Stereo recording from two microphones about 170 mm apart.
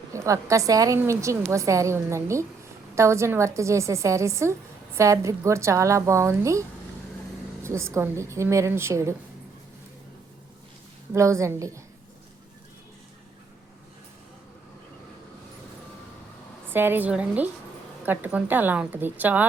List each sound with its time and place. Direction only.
0.1 s a woman's voice: 20° right (ahead or behind)
11.1 s a woman's voice: 15° right (ahead or behind)
16.6 s a woman's voice: 10° right (ahead or behind)